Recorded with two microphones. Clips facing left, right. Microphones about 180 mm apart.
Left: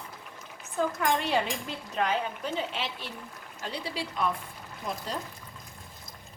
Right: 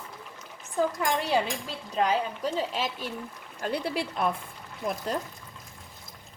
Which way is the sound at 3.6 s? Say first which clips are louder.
Right 6 dB; 55° right (ahead or behind).